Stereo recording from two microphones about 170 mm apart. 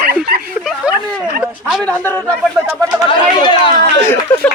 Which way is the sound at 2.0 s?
10° left (ahead or behind).